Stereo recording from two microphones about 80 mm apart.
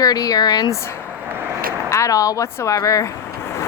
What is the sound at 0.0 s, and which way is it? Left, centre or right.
Speech, left.